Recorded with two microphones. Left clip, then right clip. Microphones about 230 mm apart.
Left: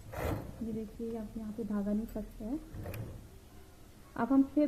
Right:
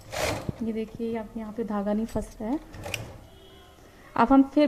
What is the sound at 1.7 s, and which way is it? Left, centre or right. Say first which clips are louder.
Speech: right 9 dB; right.